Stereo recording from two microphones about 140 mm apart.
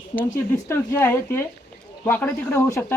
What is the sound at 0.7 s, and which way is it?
Speech, 15° left (ahead or behind).